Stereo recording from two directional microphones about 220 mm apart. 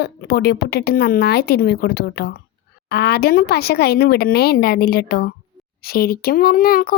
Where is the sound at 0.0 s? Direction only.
45° left (ahead or behind).